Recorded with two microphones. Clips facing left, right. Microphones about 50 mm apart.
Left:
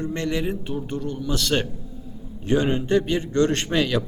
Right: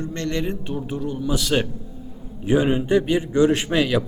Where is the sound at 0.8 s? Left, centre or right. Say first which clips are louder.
Right 2 dB; centre.